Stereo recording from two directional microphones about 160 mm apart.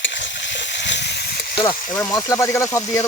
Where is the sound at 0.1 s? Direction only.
90° left.